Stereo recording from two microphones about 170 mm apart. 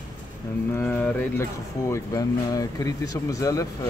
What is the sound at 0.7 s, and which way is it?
Speech, 10° left (ahead or behind).